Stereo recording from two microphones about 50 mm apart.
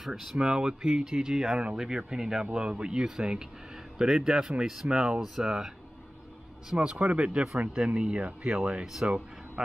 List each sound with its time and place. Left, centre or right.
0.0 s speech: centre
0.4 s speech: centre
6.8 s speech: centre